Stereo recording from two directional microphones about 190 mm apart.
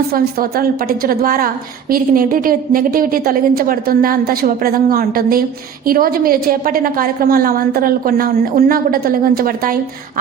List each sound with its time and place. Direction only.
0.1 s a woman's voice: 50° right (ahead or behind)